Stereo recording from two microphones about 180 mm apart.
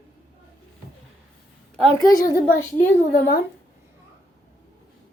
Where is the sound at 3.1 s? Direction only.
55° left (ahead or behind).